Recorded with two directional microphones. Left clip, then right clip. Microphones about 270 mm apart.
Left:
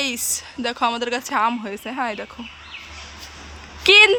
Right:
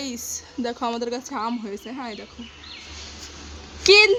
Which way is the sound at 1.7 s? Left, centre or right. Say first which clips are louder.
Left 7 dB; centre.